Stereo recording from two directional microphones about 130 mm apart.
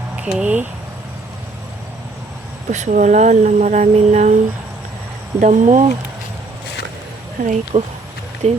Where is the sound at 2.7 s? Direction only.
70° right (ahead or behind).